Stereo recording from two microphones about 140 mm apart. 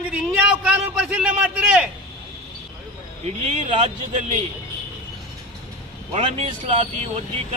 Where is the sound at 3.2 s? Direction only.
50° right (ahead or behind).